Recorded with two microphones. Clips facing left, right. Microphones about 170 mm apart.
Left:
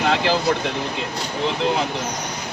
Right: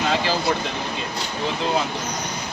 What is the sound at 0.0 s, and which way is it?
Vehicle, 65° left (ahead or behind).